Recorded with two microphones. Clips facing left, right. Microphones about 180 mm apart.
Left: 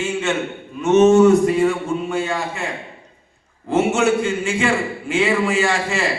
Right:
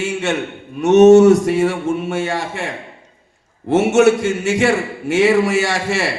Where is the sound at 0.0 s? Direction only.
75° right (ahead or behind).